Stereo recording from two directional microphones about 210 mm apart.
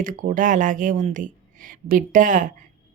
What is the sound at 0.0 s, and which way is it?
Speech, 40° right (ahead or behind).